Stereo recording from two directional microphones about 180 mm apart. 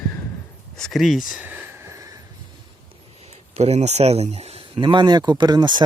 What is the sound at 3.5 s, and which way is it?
Speech, 40° right (ahead or behind).